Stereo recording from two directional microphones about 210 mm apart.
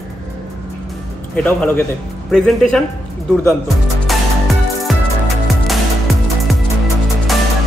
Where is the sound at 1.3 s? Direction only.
10° left (ahead or behind).